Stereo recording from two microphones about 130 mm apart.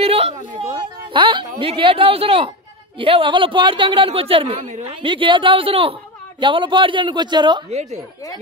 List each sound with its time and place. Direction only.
0.0 s a sound: 50° right (ahead or behind)
1.1 s a man's voice: 40° right (ahead or behind)
4.6 s a woman's voice: 65° right (ahead or behind)
5.0 s a man's voice: 40° right (ahead or behind)